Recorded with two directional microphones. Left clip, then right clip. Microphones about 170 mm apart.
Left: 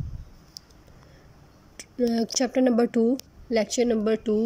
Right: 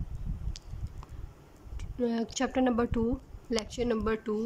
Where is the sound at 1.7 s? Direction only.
5° left (ahead or behind).